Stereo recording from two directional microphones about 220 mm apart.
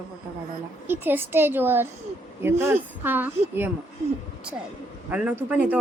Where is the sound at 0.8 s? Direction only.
10° right (ahead or behind).